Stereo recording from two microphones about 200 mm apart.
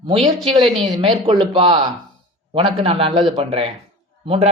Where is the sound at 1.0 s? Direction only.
25° right (ahead or behind).